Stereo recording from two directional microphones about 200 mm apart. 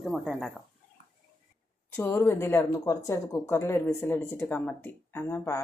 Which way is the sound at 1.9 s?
10° left (ahead or behind).